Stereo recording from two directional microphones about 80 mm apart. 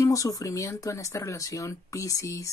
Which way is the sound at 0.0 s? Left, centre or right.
Left.